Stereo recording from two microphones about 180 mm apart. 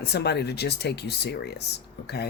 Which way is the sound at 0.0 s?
65° left (ahead or behind).